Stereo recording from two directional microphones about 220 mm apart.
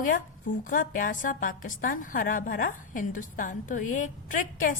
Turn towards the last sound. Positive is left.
turn(degrees=35)  # may be behind; listen again after turning